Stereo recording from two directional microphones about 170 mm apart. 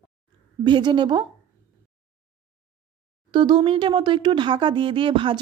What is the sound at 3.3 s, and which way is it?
A woman's voice, 25° right (ahead or behind).